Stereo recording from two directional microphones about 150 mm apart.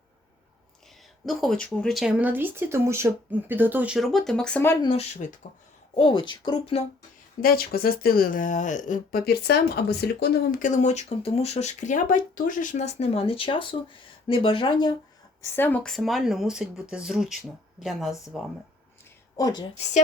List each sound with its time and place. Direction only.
1.2 s speech: centre (ahead or behind)
4.8 s speech: 40° left (ahead or behind); by 5.5 s 55° left (ahead or behind)
6.0 s speech: 35° left (ahead or behind)
7.4 s speech: 90° left; by 14.9 s 30° left (ahead or behind)
15.4 s speech: 15° left (ahead or behind)
19.4 s a woman's voice: 25° left (ahead or behind)